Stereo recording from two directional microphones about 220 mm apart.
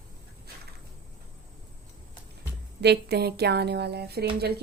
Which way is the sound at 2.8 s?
50° right (ahead or behind).